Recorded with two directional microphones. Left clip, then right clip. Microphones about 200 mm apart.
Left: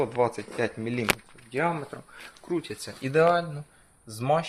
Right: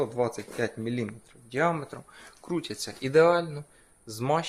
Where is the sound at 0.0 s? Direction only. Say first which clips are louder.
Left 3 dB; 10° right (ahead or behind).